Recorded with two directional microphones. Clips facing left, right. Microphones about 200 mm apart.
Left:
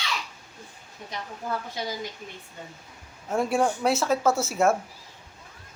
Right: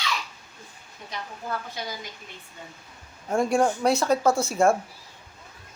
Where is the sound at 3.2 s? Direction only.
5° left (ahead or behind).